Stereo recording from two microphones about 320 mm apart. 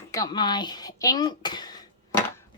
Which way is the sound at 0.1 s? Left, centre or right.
Centre.